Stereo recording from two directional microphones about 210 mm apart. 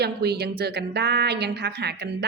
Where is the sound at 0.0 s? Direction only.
50° right (ahead or behind).